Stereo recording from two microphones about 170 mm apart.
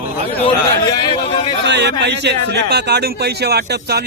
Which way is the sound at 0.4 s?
30° left (ahead or behind).